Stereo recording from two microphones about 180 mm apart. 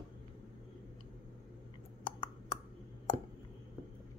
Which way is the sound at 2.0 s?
25° left (ahead or behind).